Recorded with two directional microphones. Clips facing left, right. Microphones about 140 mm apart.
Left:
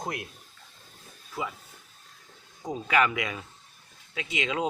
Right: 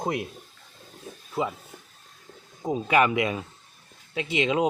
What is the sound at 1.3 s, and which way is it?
Speech, 30° right (ahead or behind).